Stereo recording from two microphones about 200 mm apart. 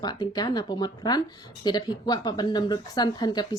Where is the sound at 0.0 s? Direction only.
20° left (ahead or behind).